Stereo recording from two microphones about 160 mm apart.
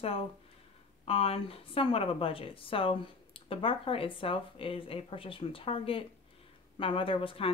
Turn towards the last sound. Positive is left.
turn(degrees=35)  # may be behind; listen again after turning